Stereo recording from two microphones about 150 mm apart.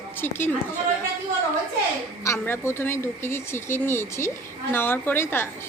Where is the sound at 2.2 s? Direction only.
15° left (ahead or behind).